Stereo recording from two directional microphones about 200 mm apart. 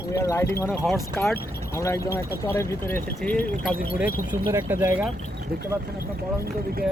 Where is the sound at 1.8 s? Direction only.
15° left (ahead or behind).